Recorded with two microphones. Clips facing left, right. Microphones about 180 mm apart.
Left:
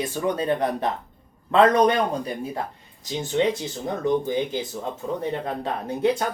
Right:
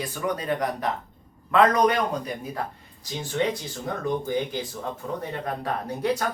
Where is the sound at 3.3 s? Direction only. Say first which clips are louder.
Left 4 dB; 25° left (ahead or behind).